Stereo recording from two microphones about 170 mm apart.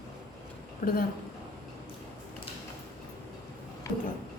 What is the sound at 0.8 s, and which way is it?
Speech, 50° left (ahead or behind).